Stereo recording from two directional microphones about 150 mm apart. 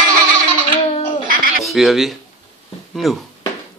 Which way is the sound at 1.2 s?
70° right (ahead or behind).